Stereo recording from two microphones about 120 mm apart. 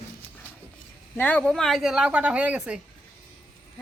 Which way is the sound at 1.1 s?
15° left (ahead or behind).